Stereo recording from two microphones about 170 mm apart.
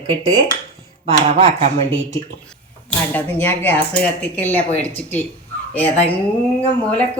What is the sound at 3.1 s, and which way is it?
A woman's voice, 10° left (ahead or behind).